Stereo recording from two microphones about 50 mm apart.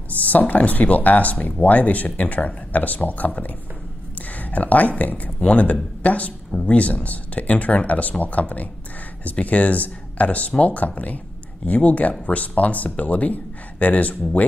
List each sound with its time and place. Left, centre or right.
0.1 s speech: left